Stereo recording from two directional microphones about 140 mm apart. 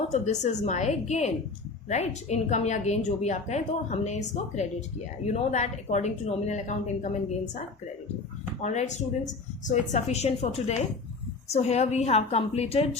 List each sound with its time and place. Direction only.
0.1 s a woman's voice: 55° left (ahead or behind)
8.6 s a woman's voice: 55° left (ahead or behind)